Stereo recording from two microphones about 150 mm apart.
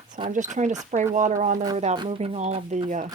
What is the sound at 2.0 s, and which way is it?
Speech, 35° right (ahead or behind).